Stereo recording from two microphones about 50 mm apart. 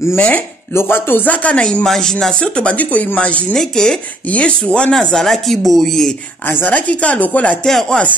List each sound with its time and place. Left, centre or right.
0.7 s speech: left
1.3 s speech: left
1.6 s speech: centre
3.5 s speech: centre
4.3 s speech: left
4.9 s speech: centre
6.4 s a woman's voice: left
6.9 s speech: left
7.6 s speech: centre